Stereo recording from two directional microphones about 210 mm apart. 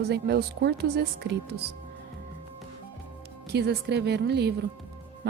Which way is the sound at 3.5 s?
50° right (ahead or behind).